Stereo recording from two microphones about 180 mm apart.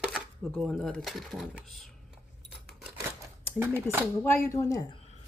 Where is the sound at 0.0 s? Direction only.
Centre (ahead or behind).